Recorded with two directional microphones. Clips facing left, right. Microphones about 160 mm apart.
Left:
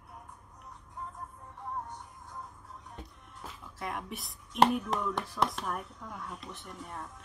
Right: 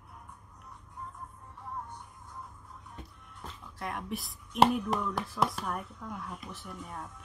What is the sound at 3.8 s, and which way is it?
A man's voice, centre (ahead or behind).